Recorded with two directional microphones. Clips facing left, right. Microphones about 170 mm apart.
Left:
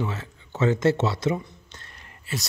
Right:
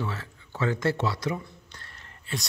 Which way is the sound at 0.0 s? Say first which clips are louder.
Left 3 dB; 20° left (ahead or behind).